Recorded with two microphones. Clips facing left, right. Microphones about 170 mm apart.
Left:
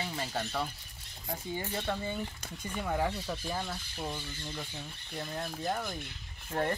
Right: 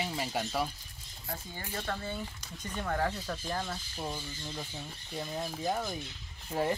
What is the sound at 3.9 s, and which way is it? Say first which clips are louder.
Speech: even; 10° right (ahead or behind).